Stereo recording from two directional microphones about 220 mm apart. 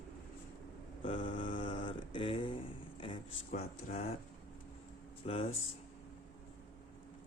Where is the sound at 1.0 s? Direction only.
25° left (ahead or behind).